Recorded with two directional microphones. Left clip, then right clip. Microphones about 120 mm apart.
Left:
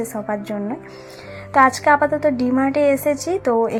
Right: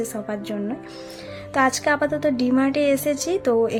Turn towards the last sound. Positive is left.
turn(degrees=-20)  # may be behind; listen again after turning